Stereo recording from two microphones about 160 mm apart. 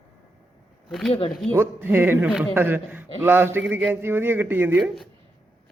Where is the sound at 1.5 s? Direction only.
15° right (ahead or behind).